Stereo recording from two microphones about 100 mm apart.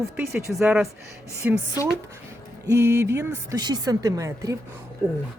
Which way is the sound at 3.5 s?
40° right (ahead or behind).